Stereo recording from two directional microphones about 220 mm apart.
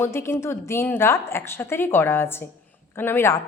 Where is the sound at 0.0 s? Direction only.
10° left (ahead or behind).